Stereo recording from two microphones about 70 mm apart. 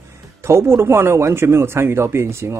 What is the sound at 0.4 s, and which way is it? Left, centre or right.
Speech, right.